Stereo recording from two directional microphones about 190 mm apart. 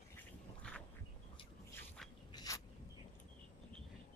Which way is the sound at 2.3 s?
15° left (ahead or behind).